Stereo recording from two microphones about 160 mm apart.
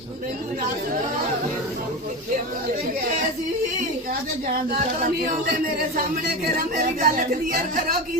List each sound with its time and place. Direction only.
4.7 s speech: 60° right (ahead or behind)